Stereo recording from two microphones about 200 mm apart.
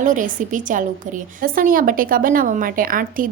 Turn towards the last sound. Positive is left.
turn(degrees=-45)  # may be behind; listen again after turning